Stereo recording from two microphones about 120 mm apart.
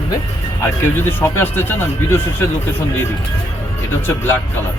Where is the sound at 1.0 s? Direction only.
20° left (ahead or behind).